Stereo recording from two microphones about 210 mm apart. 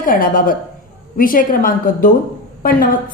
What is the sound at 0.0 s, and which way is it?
A woman's voice, 40° left (ahead or behind).